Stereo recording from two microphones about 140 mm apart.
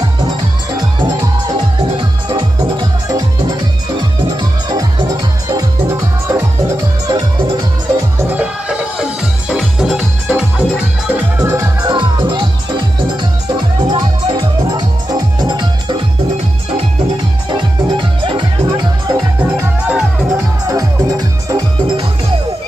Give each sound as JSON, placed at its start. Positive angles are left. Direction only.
{"t": 0.0, "sound": "music", "side_deg": -30}
{"t": 8.2, "sound": "music", "side_deg": -10}
{"t": 11.3, "sound": "music", "side_deg": -20}
{"t": 11.9, "sound": "music", "side_deg": -35}
{"t": 17.5, "sound": "music", "side_deg": -35}
{"t": 19.4, "sound": "music", "side_deg": -15}
{"t": 20.0, "sound": "music", "side_deg": -5}
{"t": 20.6, "sound": "music", "side_deg": -25}